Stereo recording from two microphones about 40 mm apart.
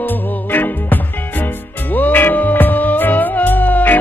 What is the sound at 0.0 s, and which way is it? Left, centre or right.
Music, left.